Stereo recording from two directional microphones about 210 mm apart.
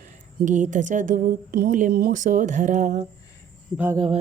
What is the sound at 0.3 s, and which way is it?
A woman's voice, 35° right (ahead or behind).